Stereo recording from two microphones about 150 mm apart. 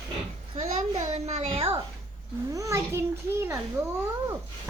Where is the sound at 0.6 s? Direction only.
55° right (ahead or behind).